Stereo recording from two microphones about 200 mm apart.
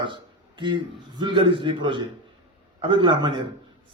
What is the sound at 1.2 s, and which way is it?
Speech, 25° right (ahead or behind).